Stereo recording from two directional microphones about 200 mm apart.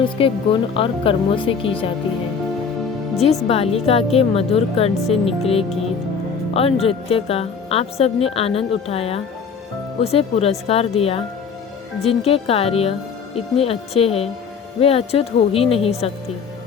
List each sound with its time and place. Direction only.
0.2 s a woman's voice: 25° left (ahead or behind)
3.5 s a woman's voice: 30° left (ahead or behind)